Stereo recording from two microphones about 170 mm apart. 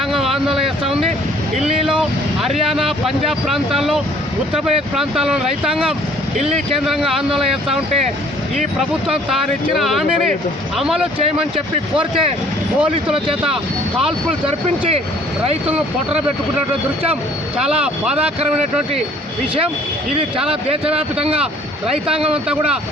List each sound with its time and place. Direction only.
0.1 s a sound: centre (ahead or behind)
1.6 s vehicle: 5° right (ahead or behind)
2.6 s speech: centre (ahead or behind)
8.8 s speech: centre (ahead or behind)
14.4 s speech: 35° right (ahead or behind)
17.6 s speech: 5° right (ahead or behind)
20.7 s speech: 35° right (ahead or behind)
21.8 s speech: 5° right (ahead or behind)